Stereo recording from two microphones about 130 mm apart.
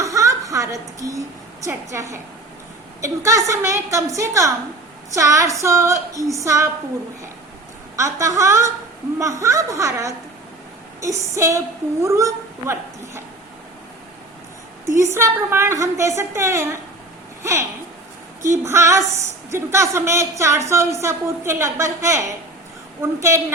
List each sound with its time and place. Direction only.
0.0 s a sound: 25° right (ahead or behind)
1.6 s a woman's voice: 25° right (ahead or behind)
7.9 s a woman's voice: 25° right (ahead or behind)
14.8 s a woman's voice: 20° right (ahead or behind)